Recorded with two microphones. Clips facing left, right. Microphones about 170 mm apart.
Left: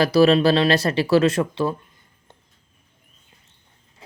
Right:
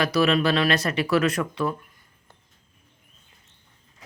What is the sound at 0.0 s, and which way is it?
Speech, 35° left (ahead or behind).